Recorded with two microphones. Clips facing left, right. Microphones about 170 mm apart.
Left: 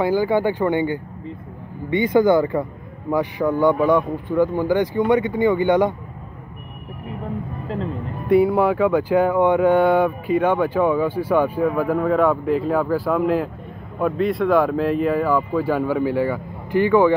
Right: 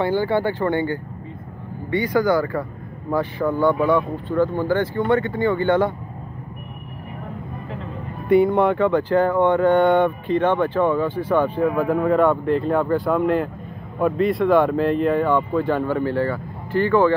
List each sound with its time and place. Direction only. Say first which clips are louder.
0.0 s speech: left 2 dB; 10° left (ahead or behind)
8.3 s speech: even; 5° left (ahead or behind)